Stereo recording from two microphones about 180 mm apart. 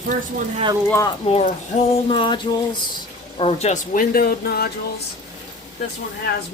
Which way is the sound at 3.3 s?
30° left (ahead or behind).